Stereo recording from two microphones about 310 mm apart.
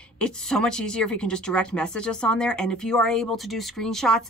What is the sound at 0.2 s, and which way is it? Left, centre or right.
Speech, centre.